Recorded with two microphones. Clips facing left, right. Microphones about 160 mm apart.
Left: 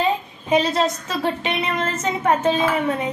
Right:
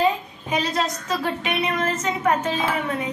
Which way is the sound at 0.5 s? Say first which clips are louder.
Left 5 dB; 25° left (ahead or behind).